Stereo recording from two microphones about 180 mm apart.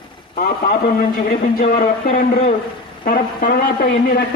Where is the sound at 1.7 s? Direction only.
40° left (ahead or behind).